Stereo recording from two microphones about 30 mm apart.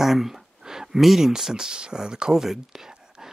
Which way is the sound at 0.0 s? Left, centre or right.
Centre.